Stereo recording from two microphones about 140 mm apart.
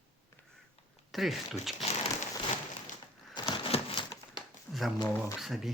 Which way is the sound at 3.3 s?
35° left (ahead or behind).